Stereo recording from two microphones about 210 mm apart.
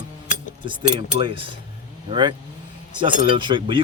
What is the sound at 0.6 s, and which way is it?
Speech, 25° right (ahead or behind).